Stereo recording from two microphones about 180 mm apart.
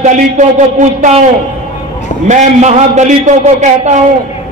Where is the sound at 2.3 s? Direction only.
40° right (ahead or behind).